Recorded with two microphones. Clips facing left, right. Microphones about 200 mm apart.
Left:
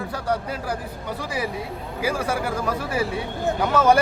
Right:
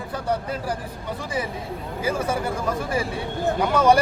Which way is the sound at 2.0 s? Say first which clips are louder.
Even; 25° right (ahead or behind).